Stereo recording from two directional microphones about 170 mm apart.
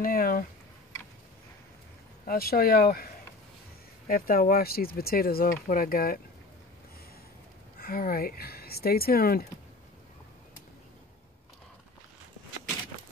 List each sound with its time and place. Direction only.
0.0 s speech: 60° left (ahead or behind)
2.2 s speech: 60° left (ahead or behind)
4.1 s speech: 60° left (ahead or behind)
7.8 s speech: 60° left (ahead or behind)